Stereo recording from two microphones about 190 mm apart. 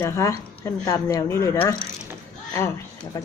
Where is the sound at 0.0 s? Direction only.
15° left (ahead or behind).